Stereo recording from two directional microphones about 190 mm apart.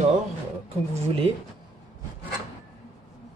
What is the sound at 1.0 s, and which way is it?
Speech, 30° right (ahead or behind).